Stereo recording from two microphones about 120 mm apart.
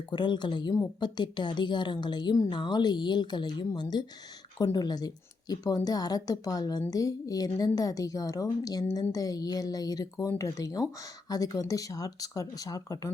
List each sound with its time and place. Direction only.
0.1 s a woman's voice: 40° left (ahead or behind)